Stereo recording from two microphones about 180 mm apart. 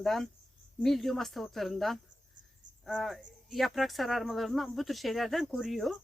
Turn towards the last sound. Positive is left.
turn(degrees=0)  # may be behind; listen again after turning